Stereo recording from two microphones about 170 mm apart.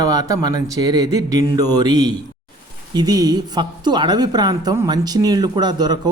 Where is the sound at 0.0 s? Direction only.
20° right (ahead or behind).